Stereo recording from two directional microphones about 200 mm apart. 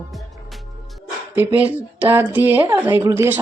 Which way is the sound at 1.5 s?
10° right (ahead or behind).